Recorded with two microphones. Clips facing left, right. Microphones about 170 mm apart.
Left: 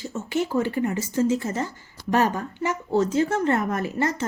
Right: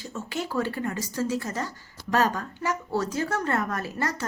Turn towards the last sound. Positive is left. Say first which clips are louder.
# left 4 dB
turn(degrees=20)  # may be behind; listen again after turning